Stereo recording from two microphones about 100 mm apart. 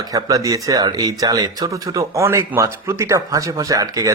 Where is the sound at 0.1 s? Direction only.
35° right (ahead or behind).